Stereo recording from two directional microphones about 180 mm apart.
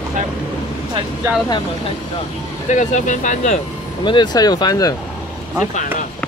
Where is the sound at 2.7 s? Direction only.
40° left (ahead or behind).